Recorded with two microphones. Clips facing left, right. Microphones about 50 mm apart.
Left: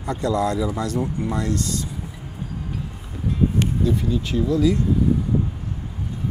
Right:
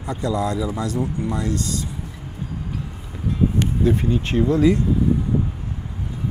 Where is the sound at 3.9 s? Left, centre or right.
Right.